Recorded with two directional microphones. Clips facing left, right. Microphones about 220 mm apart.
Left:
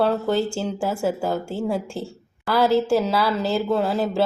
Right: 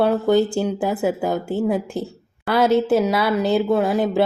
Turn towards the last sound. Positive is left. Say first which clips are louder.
# right 3 dB
turn(degrees=-20)  # may be behind; listen again after turning